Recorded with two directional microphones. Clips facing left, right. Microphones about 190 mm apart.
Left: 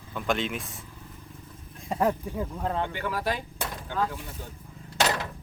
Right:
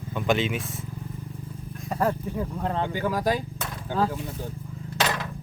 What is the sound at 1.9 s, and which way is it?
Speech, 15° left (ahead or behind).